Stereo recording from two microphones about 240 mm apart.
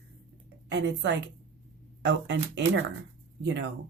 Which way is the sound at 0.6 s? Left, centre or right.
Right.